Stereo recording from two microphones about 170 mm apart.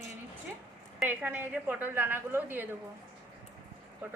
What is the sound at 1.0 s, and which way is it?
A woman's voice, 10° right (ahead or behind).